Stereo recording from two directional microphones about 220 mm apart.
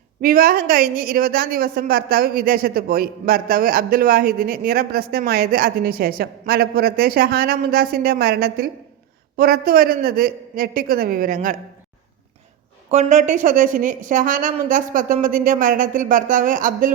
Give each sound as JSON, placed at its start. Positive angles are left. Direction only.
{"t": 0.2, "sound": "a woman's voice", "side_deg": -40}
{"t": 12.9, "sound": "a woman's voice", "side_deg": -30}